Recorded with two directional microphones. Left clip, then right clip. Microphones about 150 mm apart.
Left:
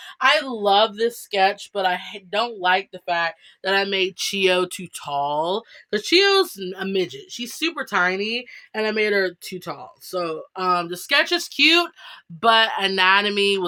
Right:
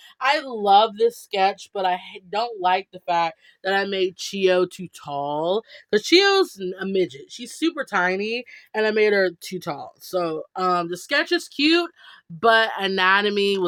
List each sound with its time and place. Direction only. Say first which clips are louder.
0.2 s speech: left 3 dB; 45° right (ahead or behind); by 11.9 s 20° right (ahead or behind)
12.4 s speech: left 1 dB; 30° right (ahead or behind)